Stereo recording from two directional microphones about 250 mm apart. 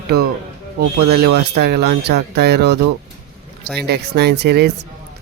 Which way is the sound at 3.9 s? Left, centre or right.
Right.